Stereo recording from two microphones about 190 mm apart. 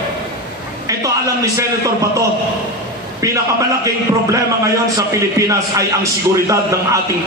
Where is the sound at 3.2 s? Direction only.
15° right (ahead or behind).